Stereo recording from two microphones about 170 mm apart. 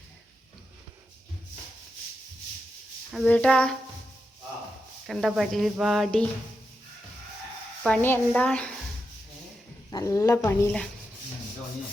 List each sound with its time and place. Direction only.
3.2 s speech: 5° left (ahead or behind)
5.0 s speech: centre (ahead or behind)
7.9 s a woman's voice: 10° left (ahead or behind)
9.9 s speech: 20° left (ahead or behind)